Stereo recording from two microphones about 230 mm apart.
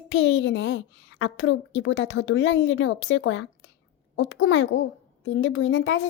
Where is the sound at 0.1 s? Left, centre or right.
Left.